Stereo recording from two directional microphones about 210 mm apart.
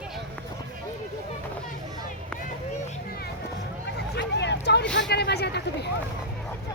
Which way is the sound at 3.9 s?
55° left (ahead or behind).